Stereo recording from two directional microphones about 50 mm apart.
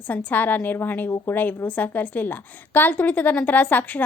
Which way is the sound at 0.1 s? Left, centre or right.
Left.